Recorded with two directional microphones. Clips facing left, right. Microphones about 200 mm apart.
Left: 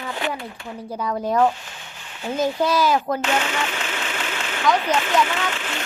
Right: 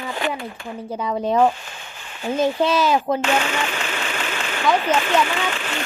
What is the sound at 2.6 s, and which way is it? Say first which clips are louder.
Speech: left 1 dB; 10° left (ahead or behind).